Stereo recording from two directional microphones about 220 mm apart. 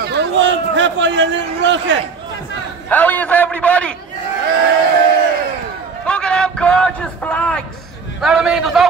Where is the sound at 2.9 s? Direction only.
10° left (ahead or behind).